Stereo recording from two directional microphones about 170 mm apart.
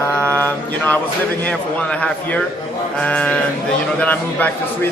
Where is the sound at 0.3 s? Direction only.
10° left (ahead or behind).